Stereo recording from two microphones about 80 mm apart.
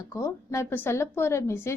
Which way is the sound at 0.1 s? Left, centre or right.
Left.